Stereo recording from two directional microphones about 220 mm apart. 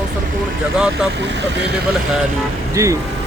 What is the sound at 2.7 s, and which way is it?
Speech, 15° right (ahead or behind).